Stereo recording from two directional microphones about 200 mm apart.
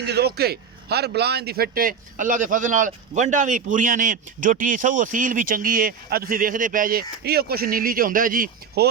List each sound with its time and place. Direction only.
0.0 s speech: 55° right (ahead or behind)